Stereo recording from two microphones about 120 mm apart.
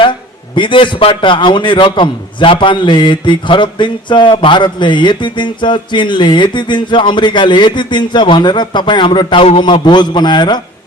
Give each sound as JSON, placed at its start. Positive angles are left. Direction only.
{"t": 0.0, "sound": "a man's voice", "side_deg": 45}